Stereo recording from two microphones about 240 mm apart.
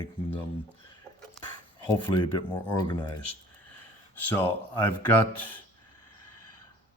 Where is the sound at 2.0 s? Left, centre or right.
Centre.